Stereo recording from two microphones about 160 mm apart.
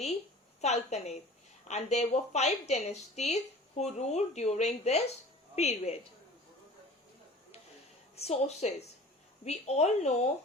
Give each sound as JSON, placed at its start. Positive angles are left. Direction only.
{"t": 0.6, "sound": "a woman's voice", "side_deg": 45}
{"t": 8.1, "sound": "a woman's voice", "side_deg": 40}